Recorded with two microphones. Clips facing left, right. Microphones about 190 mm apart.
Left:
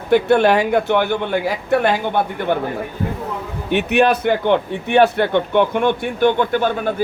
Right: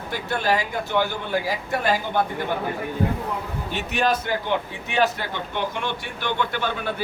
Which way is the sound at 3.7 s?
65° left (ahead or behind).